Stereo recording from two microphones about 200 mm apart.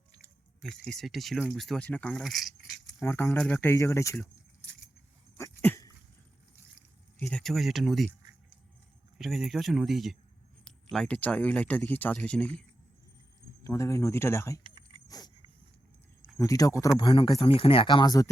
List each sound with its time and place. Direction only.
0.7 s speech: centre (ahead or behind)
3.0 s speech: 10° left (ahead or behind)
5.4 s dog: 15° left (ahead or behind)
7.2 s speech: 5° left (ahead or behind)
9.1 s speech: centre (ahead or behind)
13.7 s speech: 15° left (ahead or behind)
14.6 s keys jangling: 25° right (ahead or behind)
15.0 s a sound: 20° left (ahead or behind)
16.4 s speech: 15° left (ahead or behind)